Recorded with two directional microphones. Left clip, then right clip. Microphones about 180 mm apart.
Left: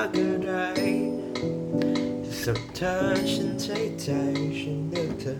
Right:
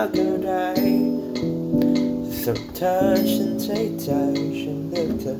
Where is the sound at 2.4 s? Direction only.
15° left (ahead or behind).